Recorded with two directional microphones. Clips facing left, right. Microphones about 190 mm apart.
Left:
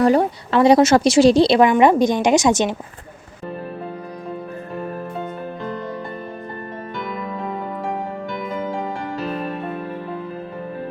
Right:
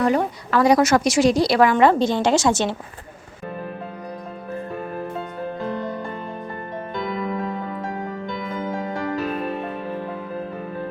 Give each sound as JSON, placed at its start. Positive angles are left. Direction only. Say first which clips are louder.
{"t": 0.0, "sound": "a woman's voice", "louder": "left 4 dB", "side_deg": 35}